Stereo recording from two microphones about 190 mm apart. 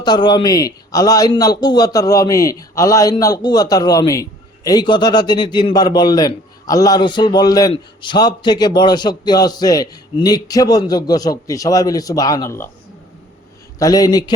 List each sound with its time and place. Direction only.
0.0 s a man's voice: 25° left (ahead or behind)
13.7 s a man's voice: 20° left (ahead or behind)